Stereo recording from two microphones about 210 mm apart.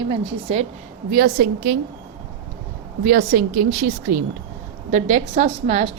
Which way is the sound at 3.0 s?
45° right (ahead or behind).